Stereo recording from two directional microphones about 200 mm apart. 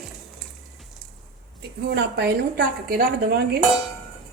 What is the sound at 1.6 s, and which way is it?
A woman's voice, 55° right (ahead or behind).